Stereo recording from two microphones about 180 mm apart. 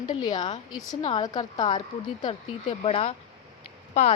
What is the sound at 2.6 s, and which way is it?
A woman's voice, 35° left (ahead or behind).